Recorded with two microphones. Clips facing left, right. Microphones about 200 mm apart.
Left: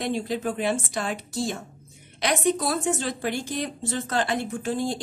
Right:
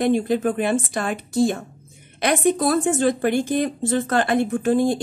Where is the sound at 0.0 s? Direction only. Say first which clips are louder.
Right 8 dB; 55° right (ahead or behind).